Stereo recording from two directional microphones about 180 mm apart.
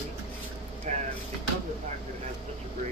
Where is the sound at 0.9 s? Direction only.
40° right (ahead or behind).